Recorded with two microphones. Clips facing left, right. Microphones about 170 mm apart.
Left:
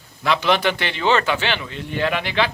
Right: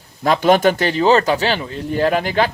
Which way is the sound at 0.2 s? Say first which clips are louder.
Right 6 dB; 45° right (ahead or behind).